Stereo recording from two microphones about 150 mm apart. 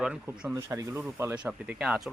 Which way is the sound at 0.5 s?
20° right (ahead or behind).